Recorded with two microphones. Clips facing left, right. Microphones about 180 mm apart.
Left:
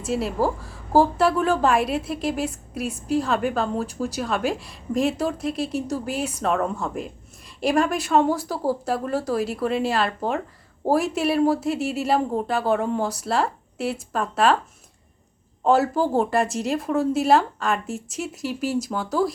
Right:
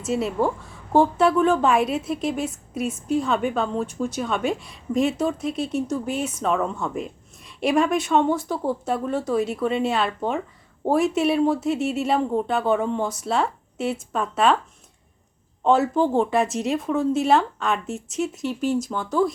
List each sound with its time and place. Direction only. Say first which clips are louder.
0.0 s speech: right 1 dB; centre (ahead or behind)
15.6 s speech: even; centre (ahead or behind)